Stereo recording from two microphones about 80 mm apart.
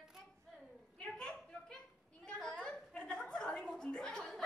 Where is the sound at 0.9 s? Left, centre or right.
Centre.